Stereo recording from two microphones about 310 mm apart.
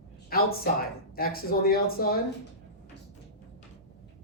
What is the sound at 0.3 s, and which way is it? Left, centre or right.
Speech, left.